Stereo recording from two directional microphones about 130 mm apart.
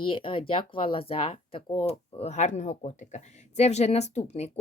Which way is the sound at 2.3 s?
60° left (ahead or behind).